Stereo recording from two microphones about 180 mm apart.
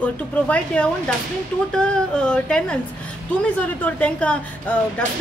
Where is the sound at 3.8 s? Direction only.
10° left (ahead or behind).